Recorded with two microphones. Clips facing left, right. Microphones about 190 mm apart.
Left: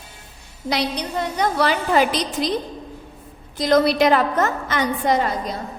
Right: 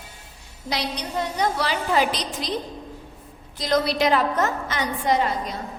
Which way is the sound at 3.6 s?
55° left (ahead or behind).